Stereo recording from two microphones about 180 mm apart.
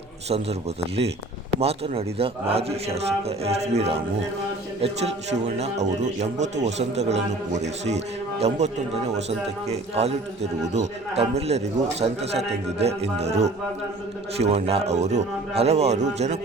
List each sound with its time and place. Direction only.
1.5 s a man's voice: 35° right (ahead or behind)
5.5 s a man's voice: 40° right (ahead or behind)